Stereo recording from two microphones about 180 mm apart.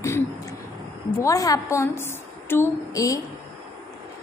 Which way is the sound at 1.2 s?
20° left (ahead or behind).